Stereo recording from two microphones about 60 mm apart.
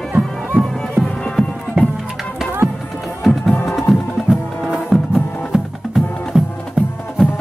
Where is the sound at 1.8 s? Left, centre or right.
Centre.